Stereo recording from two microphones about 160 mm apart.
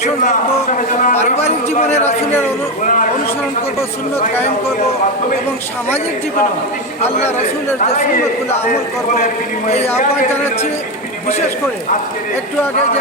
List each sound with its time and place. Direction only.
0.0 s a man's voice: 50° left (ahead or behind)
7.9 s a man's voice: 50° left (ahead or behind)
9.6 s a man's voice: 40° left (ahead or behind)